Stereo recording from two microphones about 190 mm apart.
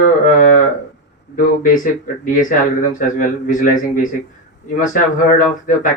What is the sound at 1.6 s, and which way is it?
Speech, 45° left (ahead or behind).